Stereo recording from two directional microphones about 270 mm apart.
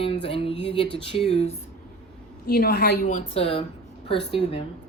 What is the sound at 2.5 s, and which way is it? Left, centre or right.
A woman's voice, left.